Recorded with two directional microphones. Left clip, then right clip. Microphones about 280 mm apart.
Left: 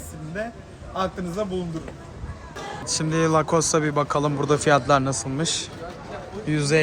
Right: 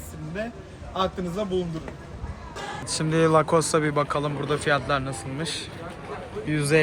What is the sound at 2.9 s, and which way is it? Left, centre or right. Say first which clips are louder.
A man's voice: right 1 dB; centre.